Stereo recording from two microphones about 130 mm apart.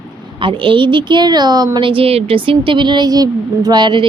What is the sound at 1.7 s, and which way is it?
Speech, 40° right (ahead or behind).